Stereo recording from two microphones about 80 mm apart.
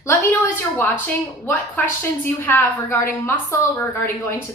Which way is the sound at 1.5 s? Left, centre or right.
Left.